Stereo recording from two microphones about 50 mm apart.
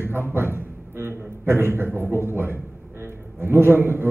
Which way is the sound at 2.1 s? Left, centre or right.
Right.